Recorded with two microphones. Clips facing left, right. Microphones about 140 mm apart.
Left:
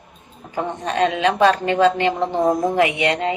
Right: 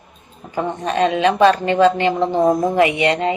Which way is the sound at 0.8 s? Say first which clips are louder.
Right 2 dB; 15° right (ahead or behind).